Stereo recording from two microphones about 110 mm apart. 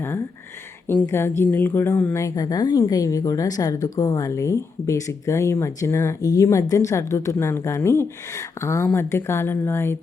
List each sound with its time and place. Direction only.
1.0 s a woman's voice: 25° left (ahead or behind)
2.2 s a woman's voice: 30° left (ahead or behind)